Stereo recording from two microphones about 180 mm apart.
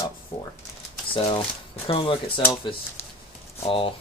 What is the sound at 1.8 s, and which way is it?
Speech, 30° left (ahead or behind).